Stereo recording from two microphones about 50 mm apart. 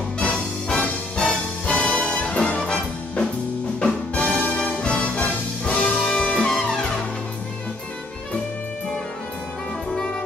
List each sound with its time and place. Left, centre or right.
0.2 s music: centre
5.8 s music: centre